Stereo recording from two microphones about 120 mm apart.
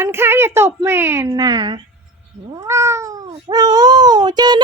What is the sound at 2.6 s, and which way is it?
Cat, 25° right (ahead or behind).